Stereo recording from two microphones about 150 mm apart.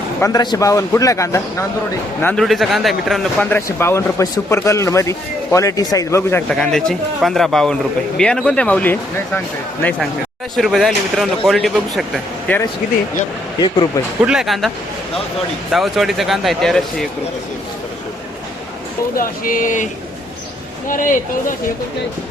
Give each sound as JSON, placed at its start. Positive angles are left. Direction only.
{"t": 0.2, "sound": "a man's voice", "side_deg": 25}
{"t": 2.2, "sound": "speech", "side_deg": 5}
{"t": 3.5, "sound": "a man's voice", "side_deg": 15}
{"t": 6.5, "sound": "speech", "side_deg": 5}
{"t": 10.5, "sound": "speech", "side_deg": 0}
{"t": 13.6, "sound": "a man's voice", "side_deg": 25}
{"t": 14.3, "sound": "speech", "side_deg": 0}
{"t": 15.7, "sound": "speech", "side_deg": 0}
{"t": 19.1, "sound": "speech", "side_deg": 70}